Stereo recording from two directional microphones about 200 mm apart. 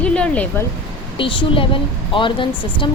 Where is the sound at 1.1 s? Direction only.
25° left (ahead or behind).